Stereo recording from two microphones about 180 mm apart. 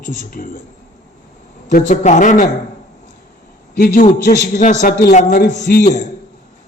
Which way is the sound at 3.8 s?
55° left (ahead or behind).